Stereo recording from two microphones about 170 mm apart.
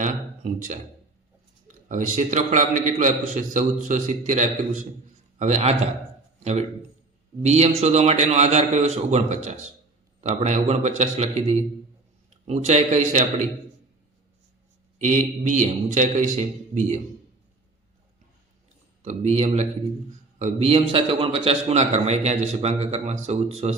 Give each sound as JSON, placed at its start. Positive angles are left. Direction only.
{"t": 0.0, "sound": "a man's voice", "side_deg": -45}
{"t": 15.0, "sound": "a man's voice", "side_deg": -45}
{"t": 19.0, "sound": "a man's voice", "side_deg": -40}